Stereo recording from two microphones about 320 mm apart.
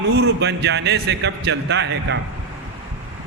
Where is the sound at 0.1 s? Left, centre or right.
Right.